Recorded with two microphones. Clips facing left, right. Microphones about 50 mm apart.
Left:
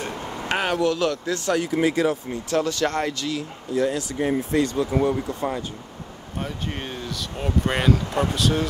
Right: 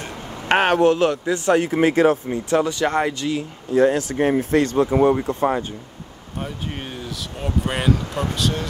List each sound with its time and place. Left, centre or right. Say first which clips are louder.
0.5 s speech: right 7 dB; right
0.8 s speech: right 5 dB; right
2.5 s speech: right 3 dB; centre
3.7 s speech: right 6 dB; right
6.4 s speech: even; centre